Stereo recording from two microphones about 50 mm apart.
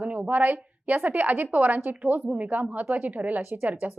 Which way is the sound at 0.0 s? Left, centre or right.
Right.